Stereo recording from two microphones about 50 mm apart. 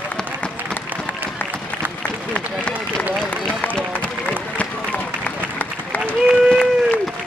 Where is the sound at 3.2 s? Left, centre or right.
Left.